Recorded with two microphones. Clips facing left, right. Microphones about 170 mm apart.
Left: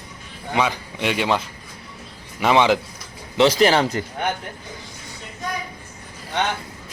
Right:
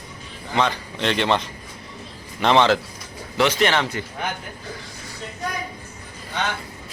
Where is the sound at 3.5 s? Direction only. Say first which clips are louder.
Left 4 dB; 35° left (ahead or behind).